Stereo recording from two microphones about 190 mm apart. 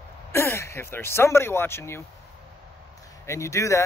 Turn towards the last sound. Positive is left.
turn(degrees=15)  # may be behind; listen again after turning